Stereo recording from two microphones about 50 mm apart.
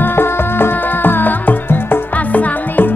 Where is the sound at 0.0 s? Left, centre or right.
Left.